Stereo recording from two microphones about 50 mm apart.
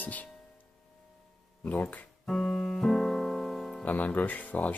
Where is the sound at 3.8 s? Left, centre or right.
Left.